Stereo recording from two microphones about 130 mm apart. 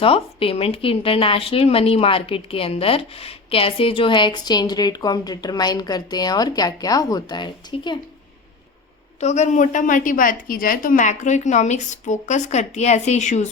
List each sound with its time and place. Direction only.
0.0 s a woman's voice: 45° left (ahead or behind)
9.2 s a woman's voice: 60° left (ahead or behind)